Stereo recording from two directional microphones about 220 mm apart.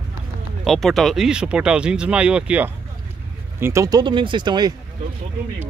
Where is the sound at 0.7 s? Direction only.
Centre (ahead or behind); by 4.7 s 20° right (ahead or behind).